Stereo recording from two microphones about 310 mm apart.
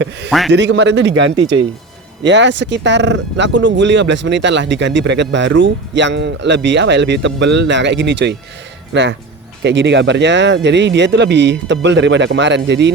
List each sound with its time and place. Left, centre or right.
0.3 s a man's voice: centre
0.5 s speech: right